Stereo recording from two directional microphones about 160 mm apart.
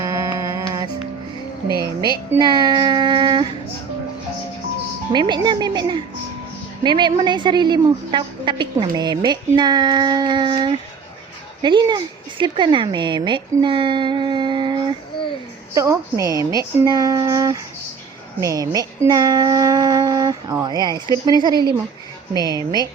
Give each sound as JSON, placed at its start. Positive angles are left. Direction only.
{"t": 0.0, "sound": "music", "side_deg": -20}
{"t": 2.4, "sound": "child singing", "side_deg": -25}
{"t": 5.1, "sound": "a woman's voice", "side_deg": -30}
{"t": 15.7, "sound": "a woman's voice", "side_deg": -20}